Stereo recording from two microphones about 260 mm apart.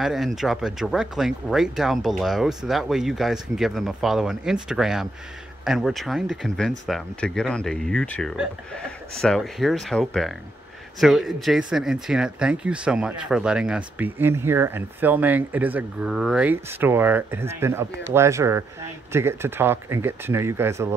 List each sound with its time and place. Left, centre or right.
0.0 s speech: centre